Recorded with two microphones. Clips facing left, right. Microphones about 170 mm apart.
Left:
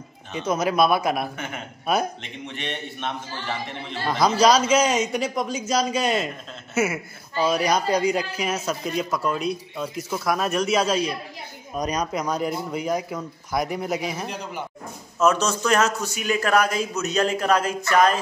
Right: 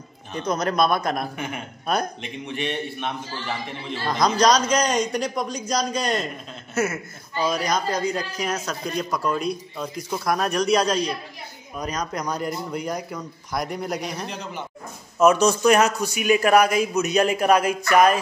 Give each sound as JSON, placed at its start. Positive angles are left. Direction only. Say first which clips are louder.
{"t": 0.3, "sound": "a man's voice", "louder": "left 1 dB", "side_deg": 5}
{"t": 2.5, "sound": "a man's voice", "louder": "right 6 dB", "side_deg": -10}
{"t": 4.4, "sound": "a man's voice", "louder": "left 2 dB", "side_deg": 5}
{"t": 15.1, "sound": "a man's voice", "louder": "right 4 dB", "side_deg": -10}